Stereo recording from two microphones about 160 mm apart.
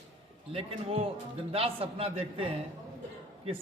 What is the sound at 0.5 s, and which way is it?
A man's voice, 35° right (ahead or behind).